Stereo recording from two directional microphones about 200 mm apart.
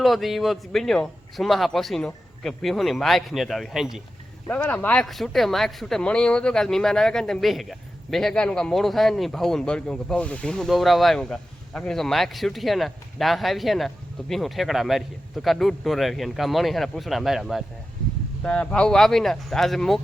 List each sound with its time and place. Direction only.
0.0 s speech: centre (ahead or behind)
4.4 s speech: 10° left (ahead or behind)